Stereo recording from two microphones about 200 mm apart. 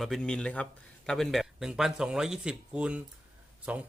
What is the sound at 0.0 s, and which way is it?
Speech, 5° left (ahead or behind).